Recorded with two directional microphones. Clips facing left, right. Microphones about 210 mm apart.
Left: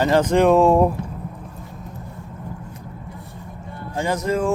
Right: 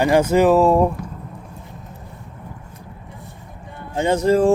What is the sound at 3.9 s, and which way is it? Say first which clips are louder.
Speech: right 6 dB; 25° right (ahead or behind).